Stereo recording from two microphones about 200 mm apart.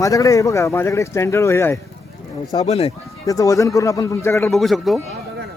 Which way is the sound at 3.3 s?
15° left (ahead or behind).